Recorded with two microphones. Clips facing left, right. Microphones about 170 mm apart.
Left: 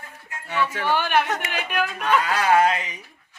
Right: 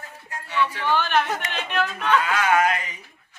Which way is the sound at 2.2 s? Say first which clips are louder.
Left 3 dB; 35° left (ahead or behind).